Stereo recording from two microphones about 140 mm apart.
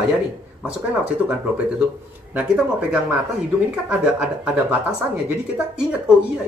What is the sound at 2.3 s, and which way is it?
Speech, 10° right (ahead or behind).